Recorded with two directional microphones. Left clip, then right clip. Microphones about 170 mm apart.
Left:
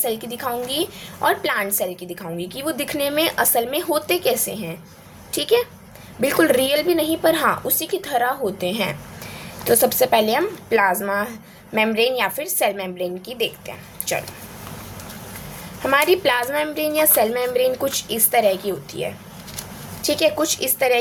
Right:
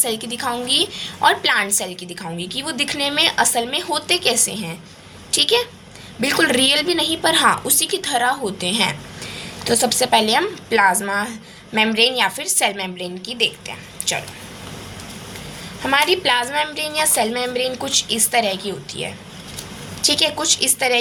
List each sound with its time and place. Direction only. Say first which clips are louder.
0.0 s a woman's voice: right 2 dB; 15° left (ahead or behind)
15.8 s a woman's voice: even; 20° left (ahead or behind)